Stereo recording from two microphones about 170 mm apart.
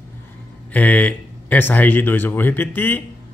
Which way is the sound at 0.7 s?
10° left (ahead or behind).